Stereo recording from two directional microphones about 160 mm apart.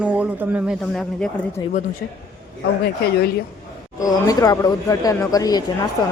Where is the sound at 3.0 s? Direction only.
75° left (ahead or behind).